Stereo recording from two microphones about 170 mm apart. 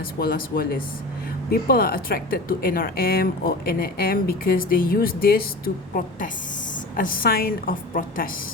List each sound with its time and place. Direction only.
0.2 s speech: 60° left (ahead or behind)